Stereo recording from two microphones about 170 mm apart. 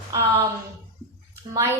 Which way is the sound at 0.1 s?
15° right (ahead or behind).